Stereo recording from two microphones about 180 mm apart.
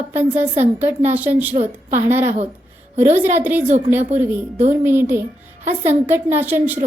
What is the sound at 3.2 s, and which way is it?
Speech, 10° right (ahead or behind).